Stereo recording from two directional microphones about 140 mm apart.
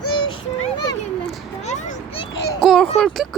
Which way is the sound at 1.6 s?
55° left (ahead or behind).